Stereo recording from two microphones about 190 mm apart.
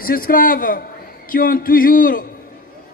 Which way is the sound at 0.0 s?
50° left (ahead or behind).